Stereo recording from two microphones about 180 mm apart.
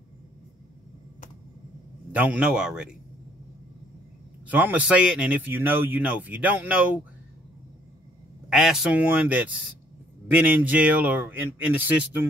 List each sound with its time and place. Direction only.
2.1 s a man's voice: 10° right (ahead or behind)
4.5 s a man's voice: 10° right (ahead or behind)
8.5 s a man's voice: centre (ahead or behind)